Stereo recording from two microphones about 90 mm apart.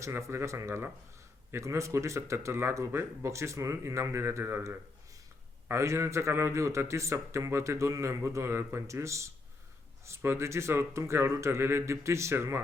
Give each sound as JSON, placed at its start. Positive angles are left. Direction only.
{"t": 0.0, "sound": "a man's voice", "side_deg": -30}